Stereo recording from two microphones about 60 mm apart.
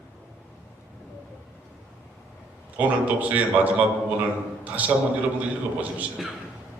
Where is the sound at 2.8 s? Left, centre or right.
Right.